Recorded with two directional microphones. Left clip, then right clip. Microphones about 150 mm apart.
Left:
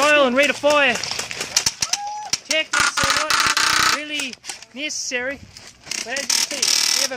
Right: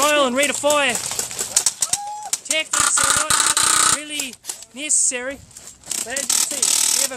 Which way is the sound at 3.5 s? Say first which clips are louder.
Left 1 dB; 20° right (ahead or behind).